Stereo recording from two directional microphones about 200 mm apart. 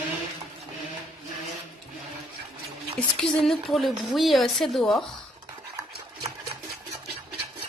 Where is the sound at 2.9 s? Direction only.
Centre (ahead or behind).